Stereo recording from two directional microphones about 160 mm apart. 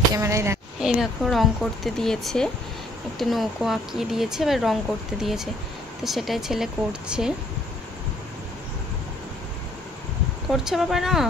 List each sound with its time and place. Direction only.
0.1 s a woman's voice: 20° right (ahead or behind)
0.7 s speech: 5° right (ahead or behind)
10.5 s speech: centre (ahead or behind)